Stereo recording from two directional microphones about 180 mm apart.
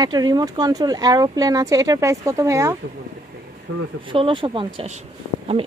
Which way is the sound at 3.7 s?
90° right.